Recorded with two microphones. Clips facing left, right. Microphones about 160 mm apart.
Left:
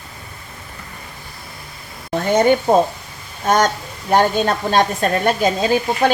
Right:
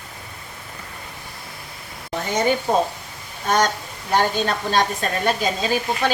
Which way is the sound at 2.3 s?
55° left (ahead or behind).